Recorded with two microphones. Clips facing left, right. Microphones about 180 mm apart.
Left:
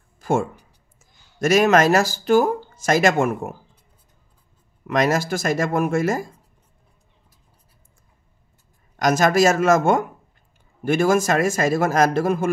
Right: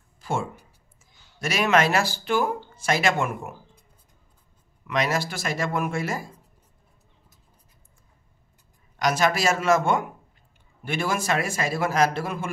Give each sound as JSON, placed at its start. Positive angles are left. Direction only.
{"t": 0.2, "sound": "a sound", "side_deg": 50}
{"t": 0.9, "sound": "speech", "side_deg": 45}
{"t": 4.8, "sound": "speech", "side_deg": 45}
{"t": 8.9, "sound": "speech", "side_deg": 45}